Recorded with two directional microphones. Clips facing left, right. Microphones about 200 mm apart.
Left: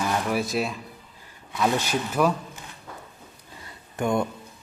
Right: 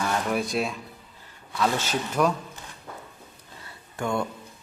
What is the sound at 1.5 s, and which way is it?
Speech, 10° left (ahead or behind).